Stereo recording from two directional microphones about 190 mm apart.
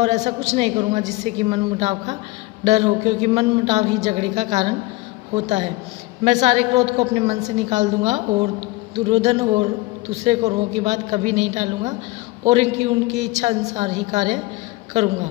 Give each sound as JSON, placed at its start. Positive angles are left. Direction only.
{"t": 0.0, "sound": "a man's voice", "side_deg": -35}